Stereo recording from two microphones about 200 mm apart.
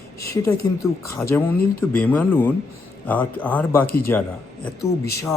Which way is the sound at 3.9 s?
50° left (ahead or behind).